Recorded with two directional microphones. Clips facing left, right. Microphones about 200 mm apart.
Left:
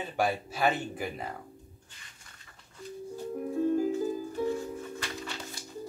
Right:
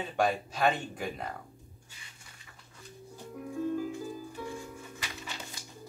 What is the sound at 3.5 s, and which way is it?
Music, 40° left (ahead or behind).